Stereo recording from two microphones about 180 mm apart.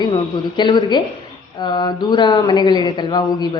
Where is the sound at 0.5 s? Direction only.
25° left (ahead or behind).